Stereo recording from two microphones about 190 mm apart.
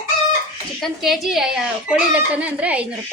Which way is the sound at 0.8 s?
Centre (ahead or behind).